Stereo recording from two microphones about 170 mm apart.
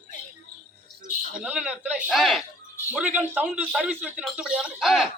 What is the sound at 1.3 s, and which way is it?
A man's voice, 5° right (ahead or behind).